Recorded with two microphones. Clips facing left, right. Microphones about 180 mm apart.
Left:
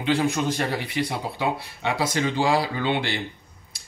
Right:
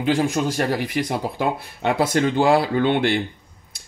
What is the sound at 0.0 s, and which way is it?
A man's voice, 40° right (ahead or behind).